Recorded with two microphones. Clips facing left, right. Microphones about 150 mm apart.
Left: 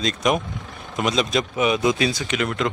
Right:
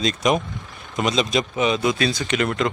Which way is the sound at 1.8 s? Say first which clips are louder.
Left 1 dB; 20° left (ahead or behind).